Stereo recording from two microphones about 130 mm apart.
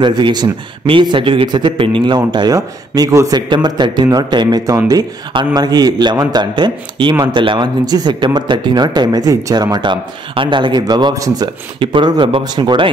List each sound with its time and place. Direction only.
0.0 s a man's voice: 35° right (ahead or behind)